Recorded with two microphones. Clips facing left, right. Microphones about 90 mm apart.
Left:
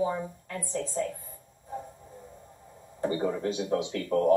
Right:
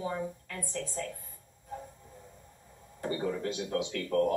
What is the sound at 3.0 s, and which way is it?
A woman's voice, 25° left (ahead or behind).